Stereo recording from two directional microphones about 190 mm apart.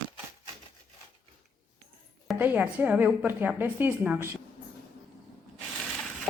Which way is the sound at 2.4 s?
10° right (ahead or behind).